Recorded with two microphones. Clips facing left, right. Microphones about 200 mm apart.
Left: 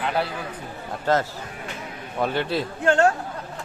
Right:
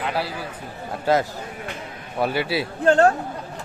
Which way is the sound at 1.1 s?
10° right (ahead or behind).